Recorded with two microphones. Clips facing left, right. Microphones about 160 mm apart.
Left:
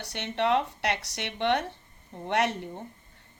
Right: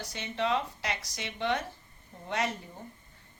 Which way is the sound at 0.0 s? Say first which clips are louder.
Left 4 dB; 70° left (ahead or behind).